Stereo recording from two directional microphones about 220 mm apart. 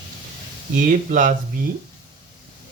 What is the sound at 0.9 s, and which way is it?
Speech, 35° right (ahead or behind).